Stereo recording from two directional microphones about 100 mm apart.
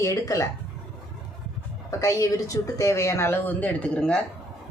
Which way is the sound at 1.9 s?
30° left (ahead or behind).